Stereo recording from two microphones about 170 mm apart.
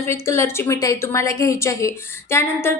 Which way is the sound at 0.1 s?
15° left (ahead or behind).